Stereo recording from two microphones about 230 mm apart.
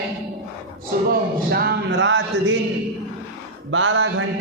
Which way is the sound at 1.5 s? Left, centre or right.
Right.